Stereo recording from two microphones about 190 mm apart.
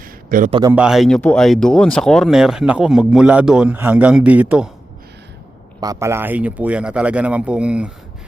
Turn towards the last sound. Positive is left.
turn(degrees=-5)  # may be behind; listen again after turning